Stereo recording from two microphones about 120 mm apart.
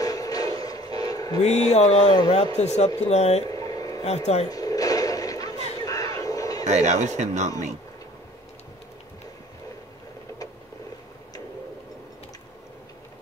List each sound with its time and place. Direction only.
0.0 s music: 30° left (ahead or behind)
1.4 s mantra: 70° left (ahead or behind)
2.0 s a man's voice: 35° left (ahead or behind)
2.5 s speech: 65° left (ahead or behind)
3.4 s a sound: 30° left (ahead or behind)
6.6 s speech: 70° right (ahead or behind)